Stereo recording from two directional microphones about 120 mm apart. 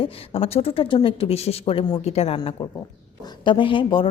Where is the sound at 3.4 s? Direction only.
45° left (ahead or behind).